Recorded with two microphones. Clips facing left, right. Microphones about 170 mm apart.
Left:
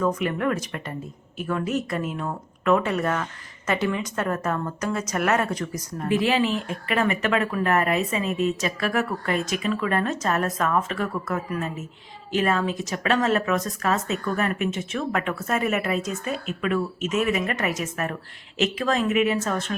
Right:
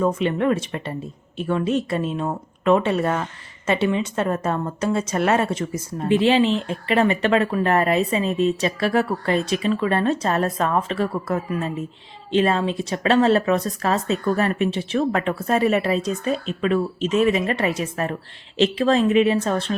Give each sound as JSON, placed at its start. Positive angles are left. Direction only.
{"t": 0.0, "sound": "a woman's voice", "side_deg": -25}